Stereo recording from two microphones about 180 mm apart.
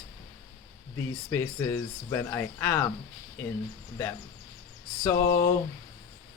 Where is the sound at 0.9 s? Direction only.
15° left (ahead or behind).